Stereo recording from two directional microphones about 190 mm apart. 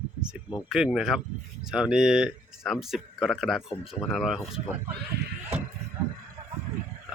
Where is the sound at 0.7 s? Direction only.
5° right (ahead or behind).